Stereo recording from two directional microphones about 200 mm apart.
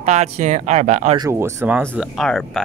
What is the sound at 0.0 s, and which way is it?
Speech, 35° right (ahead or behind).